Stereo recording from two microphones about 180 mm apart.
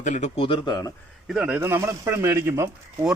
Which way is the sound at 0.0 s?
40° left (ahead or behind).